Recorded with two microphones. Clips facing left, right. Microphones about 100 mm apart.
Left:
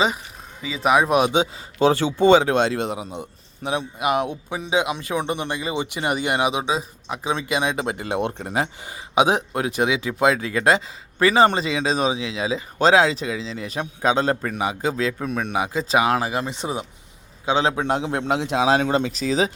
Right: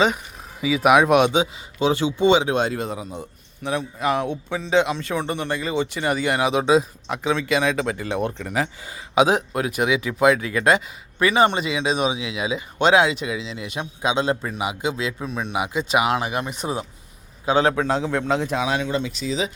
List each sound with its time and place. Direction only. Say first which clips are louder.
0.6 s speech: right 3 dB; 5° right (ahead or behind)
1.8 s speech: left 2 dB; 35° left (ahead or behind)
2.7 s speech: left 2 dB; 20° left (ahead or behind)
6.7 s speech: right 6 dB; centre (ahead or behind)
7.5 s speech: right 1 dB; 15° left (ahead or behind)
7.9 s speech: even; 50° left (ahead or behind)
8.3 s speech: even; 35° left (ahead or behind); by 15.5 s 55° left (ahead or behind)
15.5 s a man's voice: even; 35° left (ahead or behind)
17.9 s a man's voice: right 1 dB; 55° left (ahead or behind)
18.8 s speech: left 4 dB; 40° left (ahead or behind)